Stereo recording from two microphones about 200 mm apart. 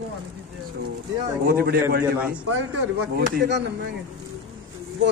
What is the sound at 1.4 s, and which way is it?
Speech, 50° right (ahead or behind).